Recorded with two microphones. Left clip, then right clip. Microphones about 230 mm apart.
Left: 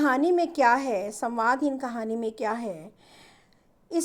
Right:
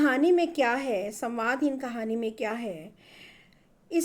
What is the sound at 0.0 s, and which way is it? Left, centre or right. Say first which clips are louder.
A woman's voice: even; centre.